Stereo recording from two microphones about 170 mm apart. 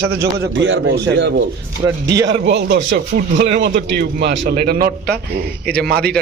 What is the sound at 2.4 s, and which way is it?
A man's voice, 90° right.